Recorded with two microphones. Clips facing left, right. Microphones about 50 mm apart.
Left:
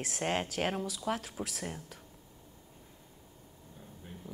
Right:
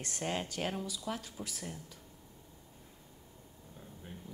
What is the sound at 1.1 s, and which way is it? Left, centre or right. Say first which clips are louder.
Speech: left 6 dB; left.